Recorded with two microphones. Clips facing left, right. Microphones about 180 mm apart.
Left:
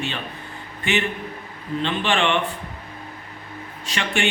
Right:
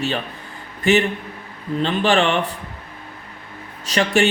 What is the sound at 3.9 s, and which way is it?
Speech, 40° right (ahead or behind).